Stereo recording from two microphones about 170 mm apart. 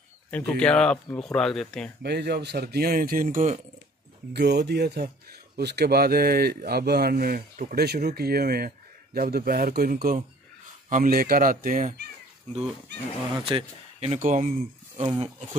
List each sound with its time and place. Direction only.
0.5 s speech: 5° left (ahead or behind)
2.0 s speech: 75° right (ahead or behind); by 3.5 s 50° right (ahead or behind)
4.3 s speech: 80° right; by 11.9 s 55° right (ahead or behind)
13.5 s speech: 35° right (ahead or behind)
15.0 s speech: 30° right (ahead or behind)